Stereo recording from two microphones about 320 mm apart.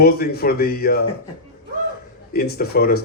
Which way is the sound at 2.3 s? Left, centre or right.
Left.